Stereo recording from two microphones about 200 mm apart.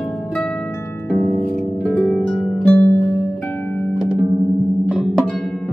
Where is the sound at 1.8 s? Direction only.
Centre (ahead or behind).